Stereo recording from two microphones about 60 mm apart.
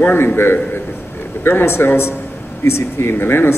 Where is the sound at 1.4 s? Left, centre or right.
Left.